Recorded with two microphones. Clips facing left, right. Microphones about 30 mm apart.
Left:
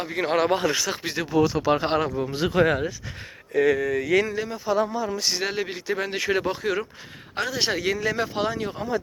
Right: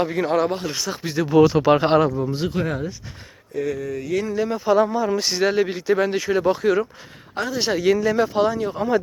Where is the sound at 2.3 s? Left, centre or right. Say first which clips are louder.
Left 3 dB; left.